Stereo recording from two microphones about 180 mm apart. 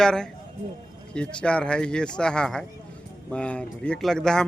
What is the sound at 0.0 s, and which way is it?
A man's voice, 5° left (ahead or behind).